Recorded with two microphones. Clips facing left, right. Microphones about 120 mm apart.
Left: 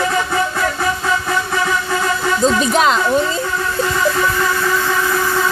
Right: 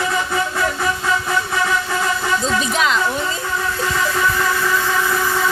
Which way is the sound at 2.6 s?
40° left (ahead or behind).